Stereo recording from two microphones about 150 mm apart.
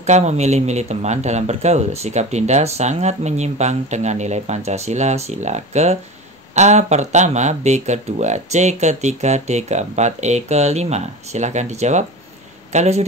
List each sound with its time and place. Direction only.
0.0 s speech: 50° right (ahead or behind)